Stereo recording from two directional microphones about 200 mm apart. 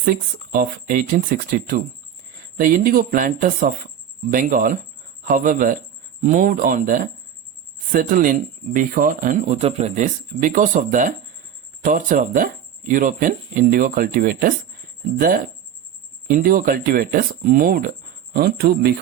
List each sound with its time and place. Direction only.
0.0 s speech: 45° right (ahead or behind)